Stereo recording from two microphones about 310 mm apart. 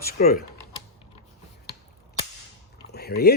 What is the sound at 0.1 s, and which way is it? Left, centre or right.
Speech, left.